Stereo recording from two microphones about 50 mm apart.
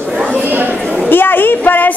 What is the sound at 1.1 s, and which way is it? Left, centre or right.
Speech, left.